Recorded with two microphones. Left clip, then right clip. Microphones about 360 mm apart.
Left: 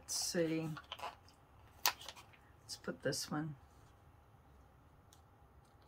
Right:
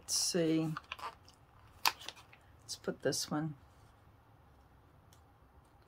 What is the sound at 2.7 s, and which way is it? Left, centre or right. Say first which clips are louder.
Speech: right 4 dB; right.